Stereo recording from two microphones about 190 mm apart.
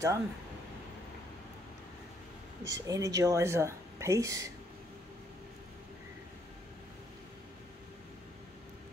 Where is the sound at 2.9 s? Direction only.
15° right (ahead or behind).